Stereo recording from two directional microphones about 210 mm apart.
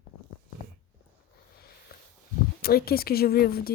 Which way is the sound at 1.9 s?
45° left (ahead or behind).